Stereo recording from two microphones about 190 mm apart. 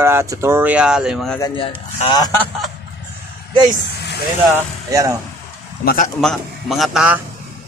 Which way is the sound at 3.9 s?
60° left (ahead or behind).